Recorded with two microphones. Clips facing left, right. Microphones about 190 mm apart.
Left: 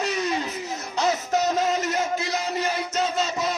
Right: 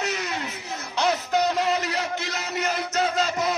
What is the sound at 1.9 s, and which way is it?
Music, 70° right (ahead or behind).